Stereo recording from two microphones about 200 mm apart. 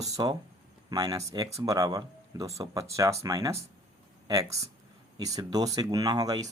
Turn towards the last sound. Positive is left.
turn(degrees=-20)  # may be behind; listen again after turning